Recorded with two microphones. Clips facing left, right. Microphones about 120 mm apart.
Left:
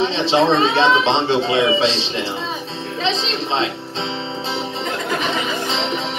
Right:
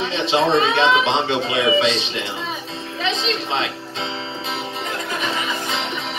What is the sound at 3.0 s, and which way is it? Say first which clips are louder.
Music: left 1 dB; 30° left (ahead or behind).